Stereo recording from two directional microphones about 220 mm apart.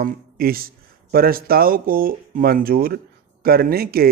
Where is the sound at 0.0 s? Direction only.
45° right (ahead or behind).